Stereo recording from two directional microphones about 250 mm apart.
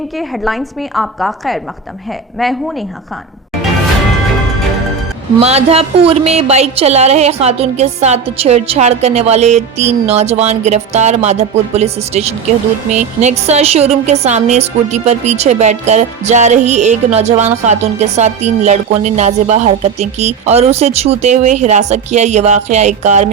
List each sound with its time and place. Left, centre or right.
0.2 s a woman's voice: centre
5.4 s a woman's voice: right